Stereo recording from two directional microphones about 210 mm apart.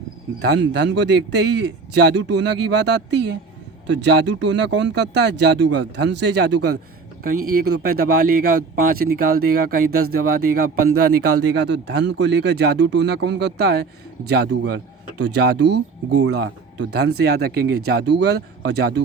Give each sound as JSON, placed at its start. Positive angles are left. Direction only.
{"t": 0.3, "sound": "a man's voice", "side_deg": -55}